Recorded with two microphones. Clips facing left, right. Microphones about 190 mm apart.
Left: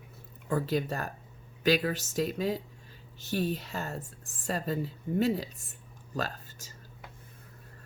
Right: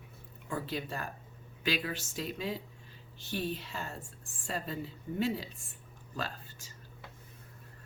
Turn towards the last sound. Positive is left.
turn(degrees=40)  # may be behind; listen again after turning